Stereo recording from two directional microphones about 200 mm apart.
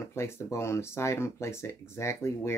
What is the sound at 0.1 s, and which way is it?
Speech, 15° left (ahead or behind).